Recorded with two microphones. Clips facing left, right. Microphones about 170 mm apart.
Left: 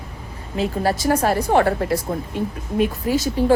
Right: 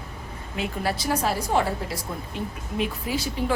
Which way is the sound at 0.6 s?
40° left (ahead or behind).